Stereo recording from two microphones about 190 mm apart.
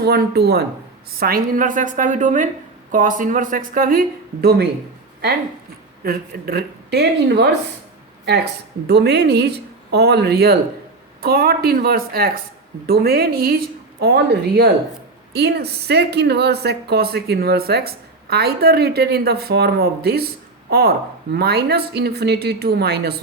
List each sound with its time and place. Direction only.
0.0 s speech: 55° right (ahead or behind)
1.2 s speech: 50° right (ahead or behind)
6.0 s speech: 50° right (ahead or behind)
8.9 s speech: 60° right (ahead or behind)